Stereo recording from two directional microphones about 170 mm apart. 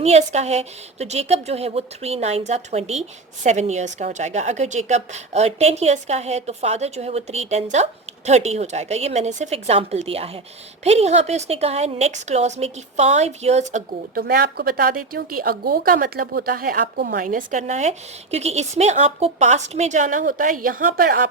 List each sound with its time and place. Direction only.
0.0 s a woman's voice: 40° right (ahead or behind)
14.2 s a woman's voice: 65° right (ahead or behind)